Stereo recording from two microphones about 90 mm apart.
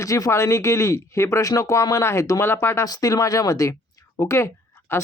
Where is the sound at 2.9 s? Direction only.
40° left (ahead or behind).